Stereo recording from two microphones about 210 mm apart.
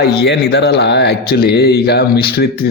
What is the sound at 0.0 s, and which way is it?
A man's voice, 50° left (ahead or behind).